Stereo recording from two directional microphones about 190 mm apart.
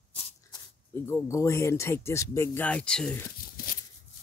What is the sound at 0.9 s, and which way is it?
Speech, 15° left (ahead or behind).